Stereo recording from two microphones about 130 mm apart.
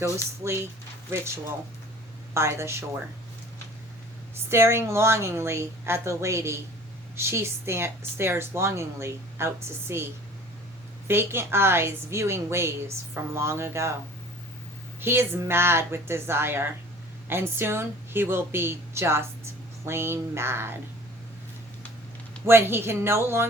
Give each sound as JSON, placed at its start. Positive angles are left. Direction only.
{"t": 0.4, "sound": "speech", "side_deg": -20}
{"t": 2.3, "sound": "speech", "side_deg": -20}
{"t": 4.4, "sound": "speech", "side_deg": -20}
{"t": 11.1, "sound": "speech", "side_deg": -20}
{"t": 15.0, "sound": "speech", "side_deg": -20}
{"t": 22.4, "sound": "speech", "side_deg": -20}